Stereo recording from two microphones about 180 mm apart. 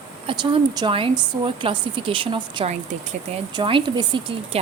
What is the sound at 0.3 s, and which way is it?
A woman's voice, 25° right (ahead or behind).